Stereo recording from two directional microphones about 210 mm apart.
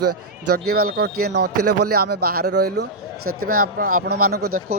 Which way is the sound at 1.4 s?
90° right.